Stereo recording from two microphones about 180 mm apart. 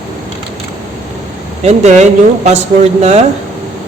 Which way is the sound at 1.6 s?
40° right (ahead or behind).